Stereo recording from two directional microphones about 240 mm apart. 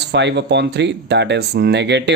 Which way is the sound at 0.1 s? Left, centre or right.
Right.